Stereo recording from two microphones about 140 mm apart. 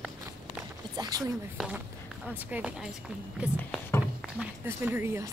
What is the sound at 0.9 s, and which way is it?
Speech, 25° right (ahead or behind).